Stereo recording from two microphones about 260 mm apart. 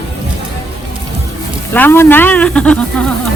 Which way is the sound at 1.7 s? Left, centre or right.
Centre.